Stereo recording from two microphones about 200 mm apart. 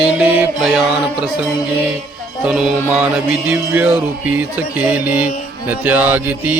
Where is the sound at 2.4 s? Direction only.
5° right (ahead or behind).